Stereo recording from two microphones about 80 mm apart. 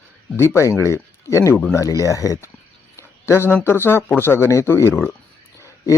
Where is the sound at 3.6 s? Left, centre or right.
Left.